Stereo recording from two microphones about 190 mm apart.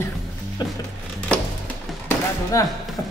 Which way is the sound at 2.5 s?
15° left (ahead or behind).